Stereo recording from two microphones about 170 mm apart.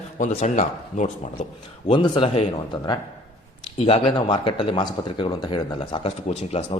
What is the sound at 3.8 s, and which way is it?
Speech, 35° left (ahead or behind).